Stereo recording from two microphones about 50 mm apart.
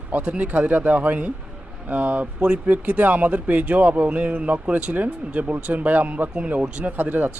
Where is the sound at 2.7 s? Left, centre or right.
Right.